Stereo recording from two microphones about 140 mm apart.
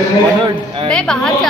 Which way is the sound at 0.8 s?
5° left (ahead or behind).